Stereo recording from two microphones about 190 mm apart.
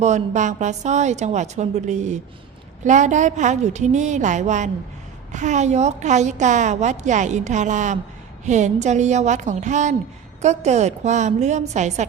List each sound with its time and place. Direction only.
0.0 s a woman's voice: 40° right (ahead or behind)